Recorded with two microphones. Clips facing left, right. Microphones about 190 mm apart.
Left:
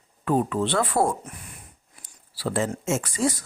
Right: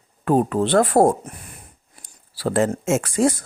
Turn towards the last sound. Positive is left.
turn(degrees=-50)  # may be behind; listen again after turning